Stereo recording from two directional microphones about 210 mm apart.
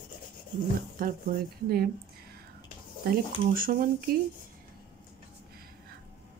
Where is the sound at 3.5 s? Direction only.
45° right (ahead or behind).